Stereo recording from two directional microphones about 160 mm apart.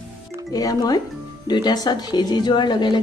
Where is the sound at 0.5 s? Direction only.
25° left (ahead or behind).